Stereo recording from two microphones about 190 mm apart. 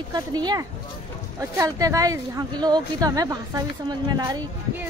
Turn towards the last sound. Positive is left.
turn(degrees=-20)  # may be behind; listen again after turning